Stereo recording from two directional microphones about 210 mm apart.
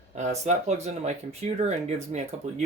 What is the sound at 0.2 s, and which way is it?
Speech, 35° right (ahead or behind).